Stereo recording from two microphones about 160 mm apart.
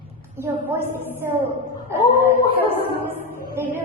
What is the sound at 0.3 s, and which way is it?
Speech, 10° right (ahead or behind).